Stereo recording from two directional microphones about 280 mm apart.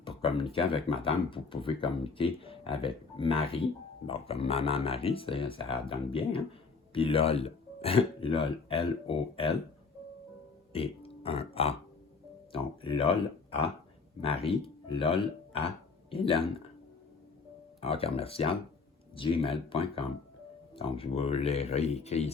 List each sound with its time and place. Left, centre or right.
0.5 s speech: centre
10.7 s speech: centre
17.7 s speech: left